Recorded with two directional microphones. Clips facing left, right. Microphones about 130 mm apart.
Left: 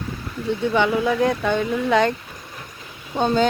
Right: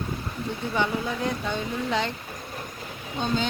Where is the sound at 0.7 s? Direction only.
85° left; by 2.1 s 60° left (ahead or behind).